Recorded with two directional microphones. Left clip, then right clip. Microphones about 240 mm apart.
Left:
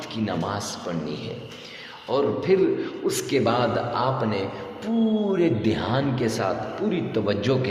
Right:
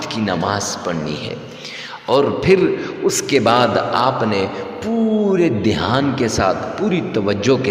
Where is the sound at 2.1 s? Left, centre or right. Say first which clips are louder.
Right 8 dB; right.